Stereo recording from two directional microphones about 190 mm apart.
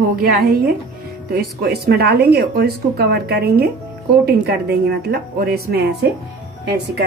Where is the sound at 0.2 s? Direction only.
55° right (ahead or behind).